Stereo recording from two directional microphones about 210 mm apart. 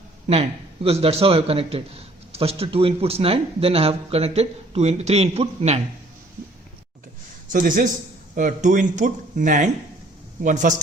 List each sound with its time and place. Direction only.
0.3 s speech: 30° right (ahead or behind)
7.4 s a man's voice: 40° right (ahead or behind)